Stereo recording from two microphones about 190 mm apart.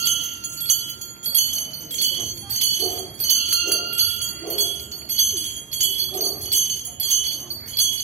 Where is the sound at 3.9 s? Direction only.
35° right (ahead or behind).